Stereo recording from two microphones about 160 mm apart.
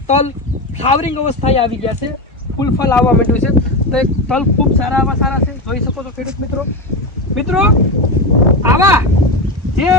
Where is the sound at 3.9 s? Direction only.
5° left (ahead or behind).